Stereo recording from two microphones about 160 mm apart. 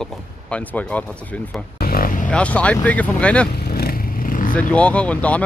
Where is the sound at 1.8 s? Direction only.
65° left (ahead or behind).